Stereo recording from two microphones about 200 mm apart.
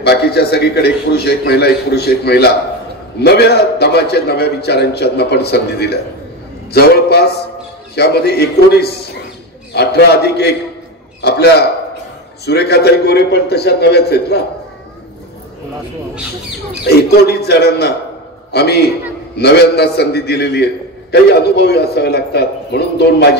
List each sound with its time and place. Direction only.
0.0 s a man's voice: 55° left (ahead or behind)
11.1 s a sound: 55° left (ahead or behind)
12.4 s a man's voice: 55° left (ahead or behind)
16.8 s a man's voice: 55° left (ahead or behind)